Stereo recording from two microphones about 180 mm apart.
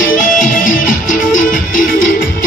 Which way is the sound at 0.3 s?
50° left (ahead or behind).